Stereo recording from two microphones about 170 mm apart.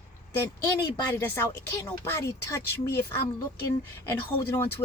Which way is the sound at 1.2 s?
15° left (ahead or behind).